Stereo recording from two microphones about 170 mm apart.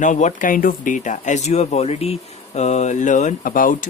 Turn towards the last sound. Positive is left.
turn(degrees=55)  # may be behind; listen again after turning